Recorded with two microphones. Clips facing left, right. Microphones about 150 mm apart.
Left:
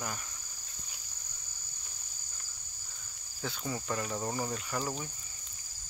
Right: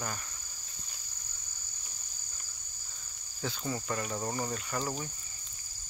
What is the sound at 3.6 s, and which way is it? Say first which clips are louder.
Cricket: even; 5° left (ahead or behind).